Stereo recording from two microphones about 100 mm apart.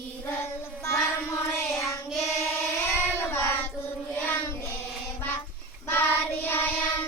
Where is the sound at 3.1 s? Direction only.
25° left (ahead or behind).